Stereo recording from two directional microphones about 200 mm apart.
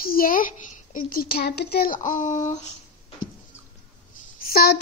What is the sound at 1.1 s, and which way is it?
Speech, 50° left (ahead or behind).